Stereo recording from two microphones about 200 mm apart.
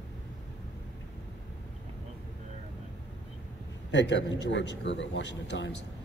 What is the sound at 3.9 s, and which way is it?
A man's voice, 60° left (ahead or behind).